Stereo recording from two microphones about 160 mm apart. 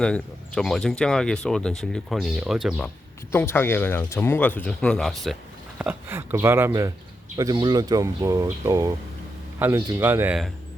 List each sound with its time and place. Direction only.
0.0 s speech: 5° left (ahead or behind)
3.3 s speech: 15° left (ahead or behind)
5.8 s speech: 10° right (ahead or behind)